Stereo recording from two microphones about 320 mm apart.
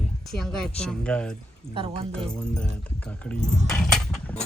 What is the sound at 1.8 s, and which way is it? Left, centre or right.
Speech, centre.